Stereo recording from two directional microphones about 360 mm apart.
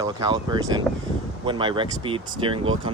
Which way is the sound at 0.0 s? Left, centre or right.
Centre.